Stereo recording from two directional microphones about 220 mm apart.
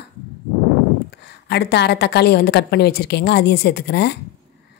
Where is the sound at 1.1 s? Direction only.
50° left (ahead or behind).